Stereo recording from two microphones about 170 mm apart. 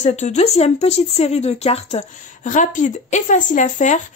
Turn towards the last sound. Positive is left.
turn(degrees=45)  # may be behind; listen again after turning